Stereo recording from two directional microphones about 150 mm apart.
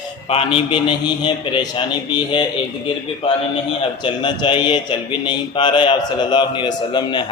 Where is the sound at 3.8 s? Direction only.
35° left (ahead or behind).